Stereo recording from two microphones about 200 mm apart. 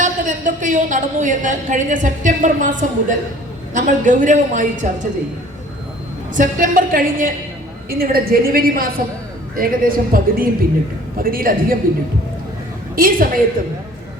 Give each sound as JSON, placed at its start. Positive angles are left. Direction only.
{"t": 0.0, "sound": "a woman's voice", "side_deg": -40}
{"t": 6.3, "sound": "a woman's voice", "side_deg": -40}
{"t": 13.0, "sound": "a woman's voice", "side_deg": -45}